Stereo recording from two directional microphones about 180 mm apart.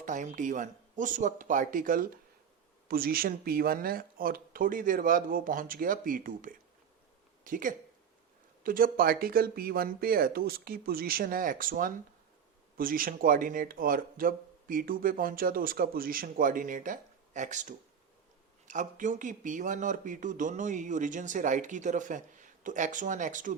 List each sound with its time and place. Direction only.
0.0 s speech: 45° right (ahead or behind)